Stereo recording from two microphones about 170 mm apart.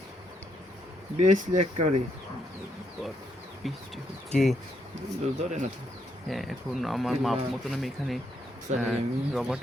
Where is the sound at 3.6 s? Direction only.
Centre (ahead or behind).